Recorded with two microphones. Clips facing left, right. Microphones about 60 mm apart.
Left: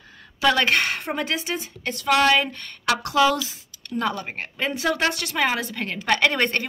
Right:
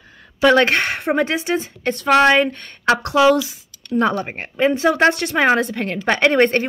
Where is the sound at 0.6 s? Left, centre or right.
Right.